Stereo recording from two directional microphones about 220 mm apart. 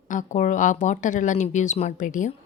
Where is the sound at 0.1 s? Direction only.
35° left (ahead or behind).